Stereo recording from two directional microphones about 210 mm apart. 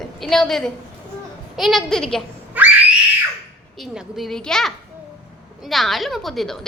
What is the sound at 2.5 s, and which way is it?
Screaming, 10° right (ahead or behind).